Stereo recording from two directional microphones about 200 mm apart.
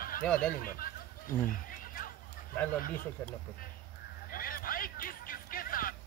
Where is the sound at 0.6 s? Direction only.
45° left (ahead or behind).